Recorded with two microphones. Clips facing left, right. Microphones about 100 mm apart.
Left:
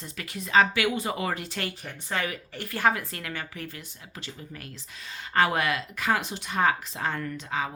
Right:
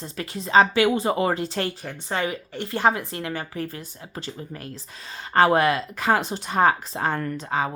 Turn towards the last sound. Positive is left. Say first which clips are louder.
# right 5 dB
turn(degrees=-40)  # may be behind; listen again after turning